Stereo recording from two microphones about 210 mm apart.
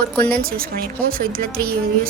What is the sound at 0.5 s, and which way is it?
Speech, 45° right (ahead or behind).